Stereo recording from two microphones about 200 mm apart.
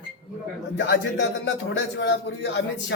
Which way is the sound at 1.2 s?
65° left (ahead or behind).